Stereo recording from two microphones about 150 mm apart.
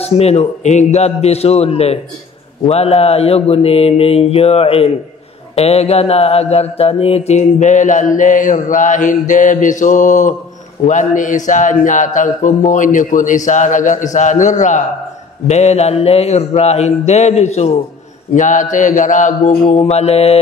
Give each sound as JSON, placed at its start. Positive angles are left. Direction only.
{"t": 0.0, "sound": "a man's voice", "side_deg": 45}
{"t": 5.6, "sound": "mantra", "side_deg": 45}
{"t": 15.4, "sound": "a man's voice", "side_deg": 50}
{"t": 18.3, "sound": "mantra", "side_deg": 55}
{"t": 19.8, "sound": "a man's voice", "side_deg": 45}